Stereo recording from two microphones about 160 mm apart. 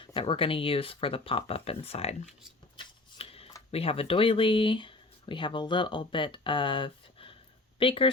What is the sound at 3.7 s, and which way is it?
Speech, 35° left (ahead or behind).